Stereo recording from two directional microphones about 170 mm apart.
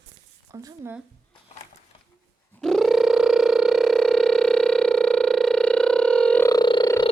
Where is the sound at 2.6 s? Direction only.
5° left (ahead or behind).